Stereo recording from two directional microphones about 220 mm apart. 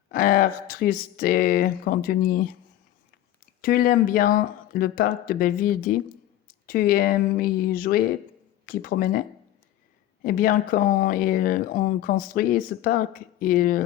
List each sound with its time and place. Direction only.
0.1 s speech: 40° left (ahead or behind)
3.6 s speech: 40° left (ahead or behind)
10.2 s speech: 40° left (ahead or behind)